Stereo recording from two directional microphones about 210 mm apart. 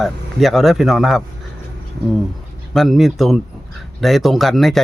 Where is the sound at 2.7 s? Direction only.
Centre (ahead or behind).